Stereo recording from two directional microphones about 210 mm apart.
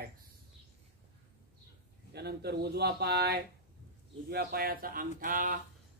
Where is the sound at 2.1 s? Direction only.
50° right (ahead or behind).